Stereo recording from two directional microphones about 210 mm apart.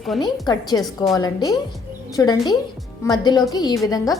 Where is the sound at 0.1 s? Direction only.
Centre (ahead or behind).